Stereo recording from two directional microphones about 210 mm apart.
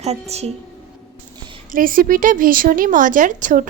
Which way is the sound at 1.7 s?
40° right (ahead or behind).